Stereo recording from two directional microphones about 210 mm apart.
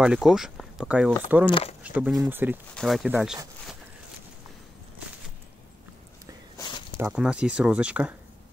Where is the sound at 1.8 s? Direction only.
5° right (ahead or behind).